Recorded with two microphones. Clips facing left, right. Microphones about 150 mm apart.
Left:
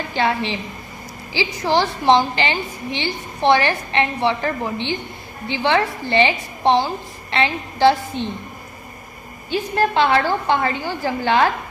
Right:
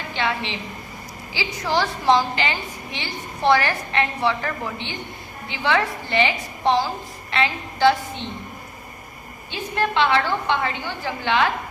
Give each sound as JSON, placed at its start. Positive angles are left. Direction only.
{"t": 0.1, "sound": "a woman's voice", "side_deg": 35}
{"t": 9.5, "sound": "a woman's voice", "side_deg": 40}